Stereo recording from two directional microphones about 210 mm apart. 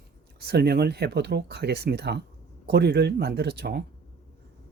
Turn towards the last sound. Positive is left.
turn(degrees=-50)  # may be behind; listen again after turning